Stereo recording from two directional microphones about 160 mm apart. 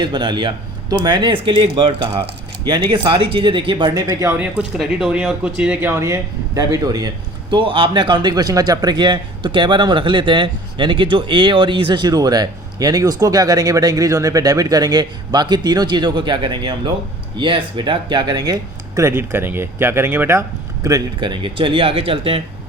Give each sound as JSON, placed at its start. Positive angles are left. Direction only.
{"t": 0.0, "sound": "speech", "side_deg": -30}
{"t": 4.4, "sound": "speech", "side_deg": -10}
{"t": 20.8, "sound": "speech", "side_deg": -25}